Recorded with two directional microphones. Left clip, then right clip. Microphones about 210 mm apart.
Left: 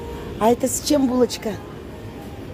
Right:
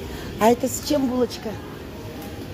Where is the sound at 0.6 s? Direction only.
20° left (ahead or behind).